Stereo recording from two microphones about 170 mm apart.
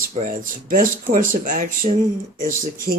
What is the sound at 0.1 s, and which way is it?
Speech, 50° right (ahead or behind).